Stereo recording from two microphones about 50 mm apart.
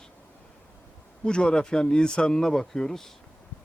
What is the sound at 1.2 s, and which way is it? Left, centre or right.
Speech, centre.